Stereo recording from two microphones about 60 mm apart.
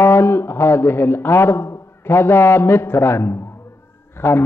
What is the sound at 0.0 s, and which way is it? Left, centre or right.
A man's voice, left.